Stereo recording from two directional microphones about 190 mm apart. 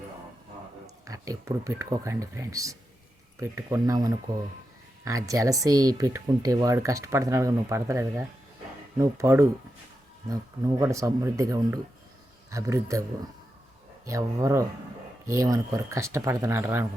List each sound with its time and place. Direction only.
1.0 s speech: 15° right (ahead or behind)
14.1 s speech: 15° right (ahead or behind)